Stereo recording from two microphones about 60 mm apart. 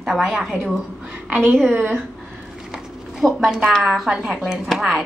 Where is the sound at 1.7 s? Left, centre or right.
Right.